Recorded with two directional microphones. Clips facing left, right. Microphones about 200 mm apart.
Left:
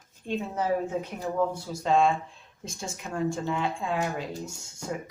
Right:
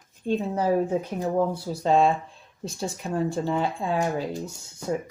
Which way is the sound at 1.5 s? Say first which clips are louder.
Right 3 dB; 35° right (ahead or behind).